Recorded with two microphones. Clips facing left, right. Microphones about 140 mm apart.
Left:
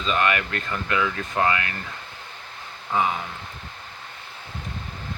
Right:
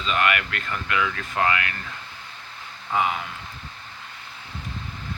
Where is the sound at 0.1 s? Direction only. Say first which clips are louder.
Left 1 dB; 30° left (ahead or behind).